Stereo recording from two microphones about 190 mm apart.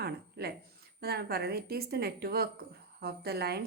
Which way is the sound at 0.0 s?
55° right (ahead or behind).